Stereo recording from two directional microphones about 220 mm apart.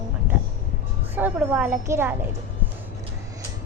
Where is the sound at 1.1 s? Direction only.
5° right (ahead or behind).